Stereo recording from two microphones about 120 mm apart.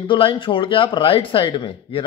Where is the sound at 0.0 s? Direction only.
45° left (ahead or behind).